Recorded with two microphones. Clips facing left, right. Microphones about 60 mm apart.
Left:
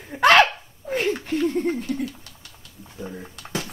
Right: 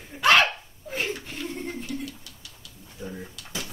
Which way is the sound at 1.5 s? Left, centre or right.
Left.